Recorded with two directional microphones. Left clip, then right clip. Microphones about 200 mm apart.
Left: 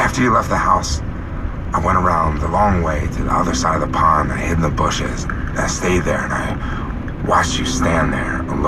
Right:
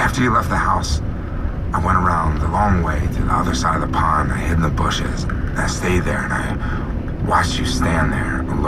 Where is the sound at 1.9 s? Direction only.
45° right (ahead or behind).